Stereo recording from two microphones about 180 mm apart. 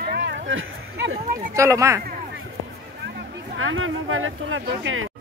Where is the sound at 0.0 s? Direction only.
65° right (ahead or behind).